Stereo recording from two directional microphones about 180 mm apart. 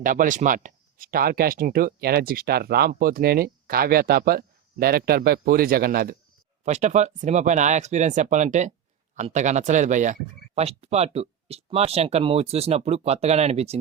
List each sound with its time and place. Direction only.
0.0 s speech: 50° right (ahead or behind)
6.7 s speech: 40° right (ahead or behind)